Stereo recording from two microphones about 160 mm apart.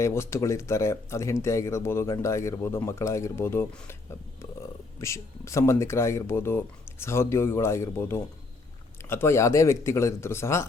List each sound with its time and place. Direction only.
0.0 s speech: 15° left (ahead or behind)
4.9 s speech: 20° left (ahead or behind)